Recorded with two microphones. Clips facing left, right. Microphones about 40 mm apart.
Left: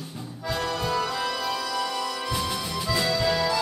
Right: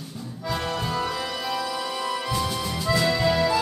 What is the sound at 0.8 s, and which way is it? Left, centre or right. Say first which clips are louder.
Music: left 1 dB; centre.